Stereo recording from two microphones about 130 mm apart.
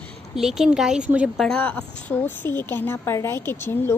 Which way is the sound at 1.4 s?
10° left (ahead or behind).